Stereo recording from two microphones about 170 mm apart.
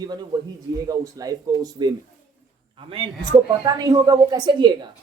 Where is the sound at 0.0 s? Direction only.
25° right (ahead or behind).